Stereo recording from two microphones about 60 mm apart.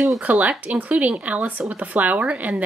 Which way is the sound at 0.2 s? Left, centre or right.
Right.